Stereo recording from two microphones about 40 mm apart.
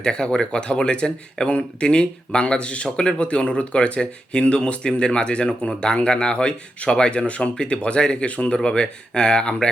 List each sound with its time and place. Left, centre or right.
0.0 s speech: left